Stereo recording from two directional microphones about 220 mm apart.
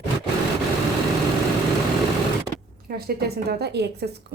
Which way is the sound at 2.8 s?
45° right (ahead or behind).